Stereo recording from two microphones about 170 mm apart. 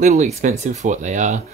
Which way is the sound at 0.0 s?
45° right (ahead or behind).